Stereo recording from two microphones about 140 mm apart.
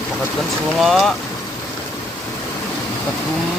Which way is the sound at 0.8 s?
Centre (ahead or behind).